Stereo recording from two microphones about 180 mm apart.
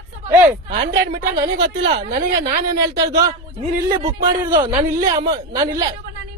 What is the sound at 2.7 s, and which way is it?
Speech, 20° right (ahead or behind).